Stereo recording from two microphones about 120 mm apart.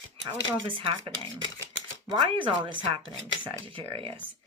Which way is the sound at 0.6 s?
45° right (ahead or behind).